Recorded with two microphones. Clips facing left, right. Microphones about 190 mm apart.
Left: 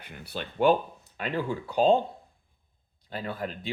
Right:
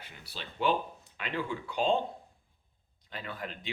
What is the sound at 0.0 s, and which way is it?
Speech, 55° left (ahead or behind).